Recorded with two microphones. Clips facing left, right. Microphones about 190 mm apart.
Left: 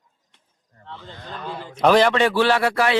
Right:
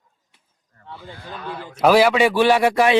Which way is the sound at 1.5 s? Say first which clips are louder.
Right 2 dB; 15° left (ahead or behind).